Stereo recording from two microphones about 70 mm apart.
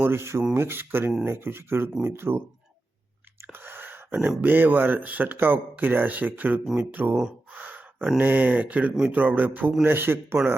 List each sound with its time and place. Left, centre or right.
0.0 s speech: right
3.4 s chewing: right
4.1 s speech: centre
7.5 s gasp: right
8.2 s speech: right